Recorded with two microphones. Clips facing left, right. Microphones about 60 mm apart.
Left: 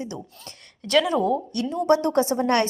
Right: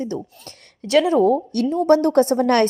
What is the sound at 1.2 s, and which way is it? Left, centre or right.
Speech, right.